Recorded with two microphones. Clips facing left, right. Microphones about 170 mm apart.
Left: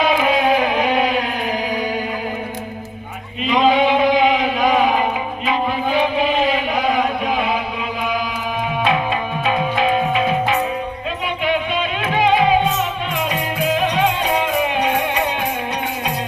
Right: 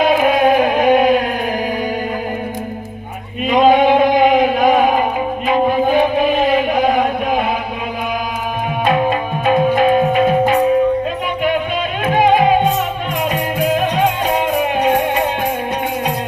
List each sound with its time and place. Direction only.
0.0 s music: 50° right (ahead or behind)
3.4 s chant: 50° right (ahead or behind)
8.8 s music: 45° right (ahead or behind)
12.0 s music: 50° right (ahead or behind)